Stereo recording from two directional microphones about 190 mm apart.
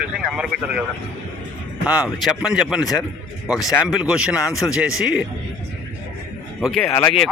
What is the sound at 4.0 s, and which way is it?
A man's voice, 5° right (ahead or behind).